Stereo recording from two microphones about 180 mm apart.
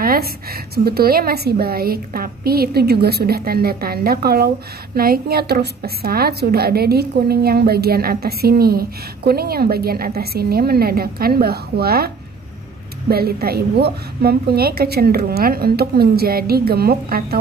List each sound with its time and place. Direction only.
0.0 s a woman's voice: 55° right (ahead or behind)
13.1 s a woman's voice: 60° right (ahead or behind)